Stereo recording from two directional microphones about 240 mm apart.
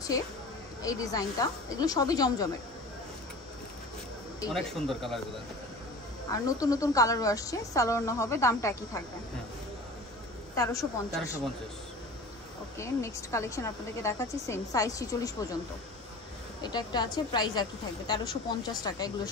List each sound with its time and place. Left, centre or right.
0.8 s a woman's voice: centre
4.5 s speech: centre
6.3 s a woman's voice: centre
10.5 s a woman's voice: centre
12.7 s a woman's voice: centre
16.6 s a woman's voice: centre